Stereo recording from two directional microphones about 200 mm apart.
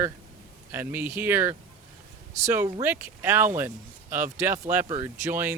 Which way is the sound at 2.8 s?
10° right (ahead or behind).